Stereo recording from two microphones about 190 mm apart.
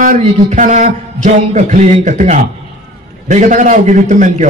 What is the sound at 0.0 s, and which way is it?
A man's voice, 40° right (ahead or behind).